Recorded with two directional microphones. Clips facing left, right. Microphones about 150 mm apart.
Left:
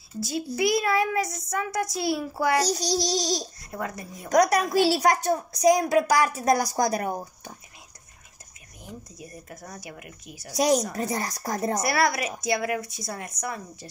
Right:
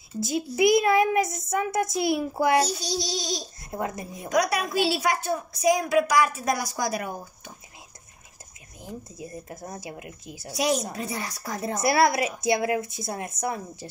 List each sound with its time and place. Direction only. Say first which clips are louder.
0.6 s a woman's voice: right 4 dB; 20° right (ahead or behind)
2.7 s a woman's voice: left 4 dB; 40° left (ahead or behind)
3.7 s a woman's voice: right 3 dB; 20° right (ahead or behind)
4.3 s a woman's voice: left 4 dB; 40° left (ahead or behind)
8.8 s a woman's voice: right 4 dB; 25° right (ahead or behind)
10.5 s a woman's voice: left 3 dB; 40° left (ahead or behind)
11.8 s a woman's voice: right 8 dB; 25° right (ahead or behind)